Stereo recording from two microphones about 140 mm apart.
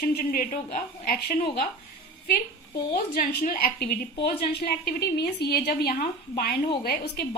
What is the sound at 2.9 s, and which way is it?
A woman's voice, 90° left.